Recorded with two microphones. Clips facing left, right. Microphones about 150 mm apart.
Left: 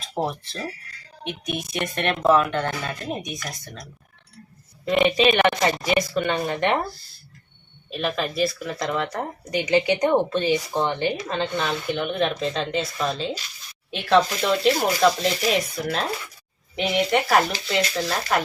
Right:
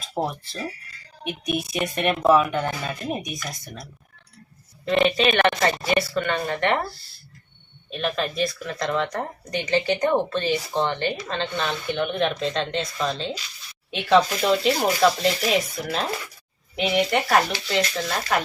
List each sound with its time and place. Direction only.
0.1 s speech: 10° right (ahead or behind)
4.9 s speech: 15° left (ahead or behind)
7.9 s speech: centre (ahead or behind)